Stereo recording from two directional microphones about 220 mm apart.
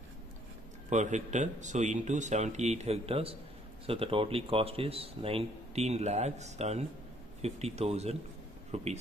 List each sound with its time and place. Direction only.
0.8 s speech: 35° right (ahead or behind)